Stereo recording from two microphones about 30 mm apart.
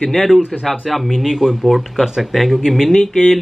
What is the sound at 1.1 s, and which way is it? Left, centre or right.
Speech, centre.